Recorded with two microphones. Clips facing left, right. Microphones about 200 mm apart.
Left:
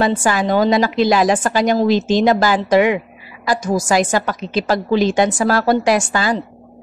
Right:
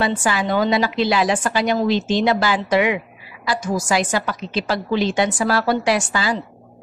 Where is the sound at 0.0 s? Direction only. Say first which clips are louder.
Left 4 dB; 45° left (ahead or behind).